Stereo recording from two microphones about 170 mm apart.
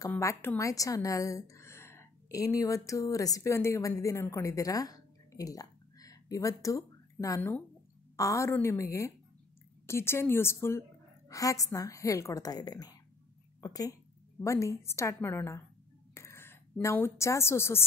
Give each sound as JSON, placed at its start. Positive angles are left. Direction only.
{"t": 0.1, "sound": "a woman's voice", "side_deg": 15}